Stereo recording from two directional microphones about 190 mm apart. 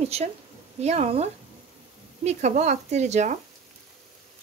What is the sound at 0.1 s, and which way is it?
Speech, 35° right (ahead or behind).